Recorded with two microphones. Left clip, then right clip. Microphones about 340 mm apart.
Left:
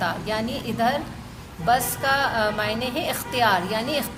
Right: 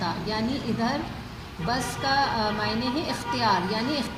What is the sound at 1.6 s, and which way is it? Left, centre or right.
Music, left.